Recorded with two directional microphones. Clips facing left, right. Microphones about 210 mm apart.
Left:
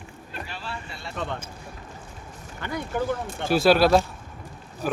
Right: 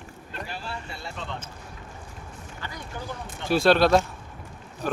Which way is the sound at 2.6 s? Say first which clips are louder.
Left 10 dB; 55° left (ahead or behind).